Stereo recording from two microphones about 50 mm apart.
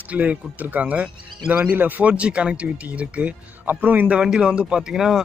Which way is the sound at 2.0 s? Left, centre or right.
Right.